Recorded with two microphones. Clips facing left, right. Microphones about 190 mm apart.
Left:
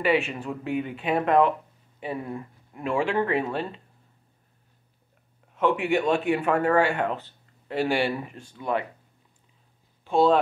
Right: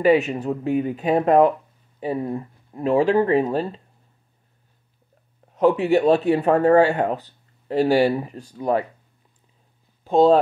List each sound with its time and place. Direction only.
0.0 s speech: 40° right (ahead or behind)
5.5 s speech: 35° right (ahead or behind)
10.1 s a sound: 40° right (ahead or behind)